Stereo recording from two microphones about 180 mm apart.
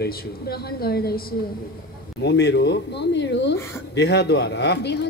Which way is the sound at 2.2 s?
70° left (ahead or behind).